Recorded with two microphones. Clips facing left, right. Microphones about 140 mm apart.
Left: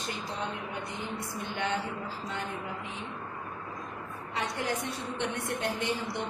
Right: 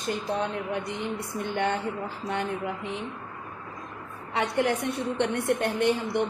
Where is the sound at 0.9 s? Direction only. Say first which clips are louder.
Right 5 dB; 60° right (ahead or behind).